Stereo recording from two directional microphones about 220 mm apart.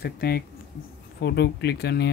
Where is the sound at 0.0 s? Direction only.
45° left (ahead or behind).